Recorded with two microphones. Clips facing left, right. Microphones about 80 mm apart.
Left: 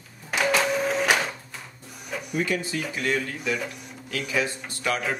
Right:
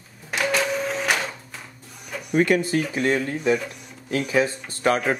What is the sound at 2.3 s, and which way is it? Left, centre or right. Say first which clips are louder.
Speech: right 8 dB; right.